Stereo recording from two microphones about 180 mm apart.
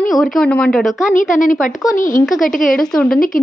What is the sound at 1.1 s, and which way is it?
A woman's voice, 45° left (ahead or behind).